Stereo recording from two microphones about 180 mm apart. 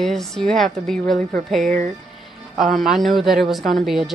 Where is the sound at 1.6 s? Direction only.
45° right (ahead or behind).